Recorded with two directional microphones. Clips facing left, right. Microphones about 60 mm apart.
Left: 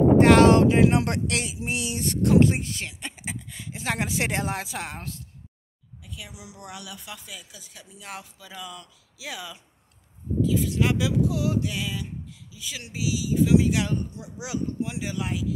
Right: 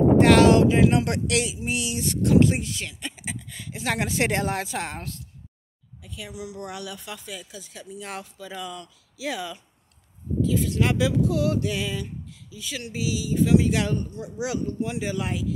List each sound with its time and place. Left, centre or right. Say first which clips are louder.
0.2 s speech: even; left
1.7 s a sound: right 1 dB; left
2.0 s speech: even; left
3.5 s speech: right 2 dB; centre
6.0 s speech: right 3 dB; centre
6.3 s speech: right 9 dB; centre
6.6 s speech: right 5 dB; centre